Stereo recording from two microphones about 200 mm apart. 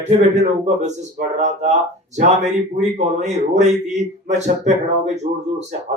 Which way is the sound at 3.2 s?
35° right (ahead or behind).